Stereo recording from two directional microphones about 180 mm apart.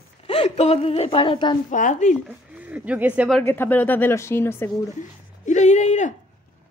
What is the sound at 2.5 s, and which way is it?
Speech, 10° right (ahead or behind).